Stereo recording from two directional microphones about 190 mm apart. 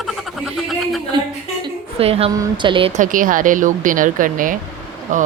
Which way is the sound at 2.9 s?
45° right (ahead or behind).